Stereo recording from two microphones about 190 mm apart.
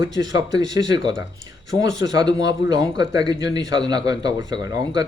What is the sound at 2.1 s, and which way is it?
A man's voice, 20° right (ahead or behind).